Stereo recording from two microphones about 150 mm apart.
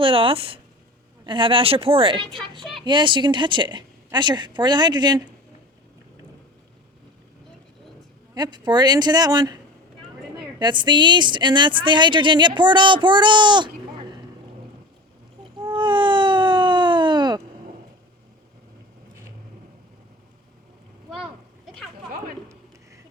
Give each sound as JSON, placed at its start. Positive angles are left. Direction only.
{"t": 0.0, "sound": "speech", "side_deg": -35}
{"t": 8.4, "sound": "speech", "side_deg": -30}
{"t": 10.6, "sound": "speech", "side_deg": -30}
{"t": 15.5, "sound": "a sound", "side_deg": -30}